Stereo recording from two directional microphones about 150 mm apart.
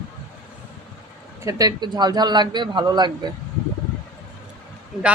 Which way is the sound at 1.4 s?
20° right (ahead or behind).